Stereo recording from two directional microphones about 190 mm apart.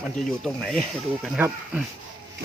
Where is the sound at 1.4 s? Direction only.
10° right (ahead or behind).